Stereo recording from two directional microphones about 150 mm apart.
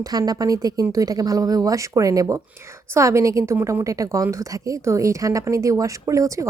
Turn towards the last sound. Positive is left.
turn(degrees=-20)  # may be behind; listen again after turning